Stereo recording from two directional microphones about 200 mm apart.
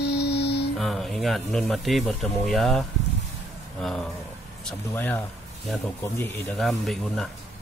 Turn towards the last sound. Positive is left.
turn(degrees=0)  # may be behind; listen again after turning